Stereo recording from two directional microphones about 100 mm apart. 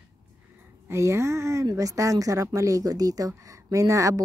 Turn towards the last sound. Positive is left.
turn(degrees=-30)  # may be behind; listen again after turning